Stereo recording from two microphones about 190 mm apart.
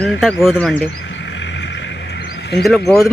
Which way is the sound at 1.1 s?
70° left (ahead or behind).